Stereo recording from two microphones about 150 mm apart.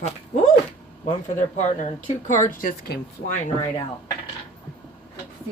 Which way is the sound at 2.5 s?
70° left (ahead or behind).